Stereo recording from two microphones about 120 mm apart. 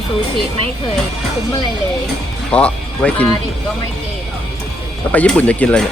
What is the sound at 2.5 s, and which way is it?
Speech, 10° left (ahead or behind).